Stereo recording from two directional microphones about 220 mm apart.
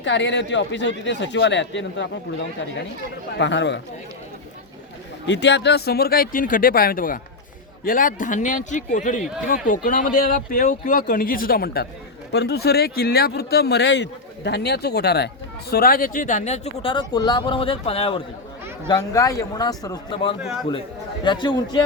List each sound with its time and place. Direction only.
0.0 s speech: 55° left (ahead or behind)
3.3 s speech: 55° left (ahead or behind)
5.2 s speech: 55° left (ahead or behind); by 20.3 s 20° left (ahead or behind)
20.4 s a man's voice: 5° right (ahead or behind)
21.2 s speech: 20° left (ahead or behind)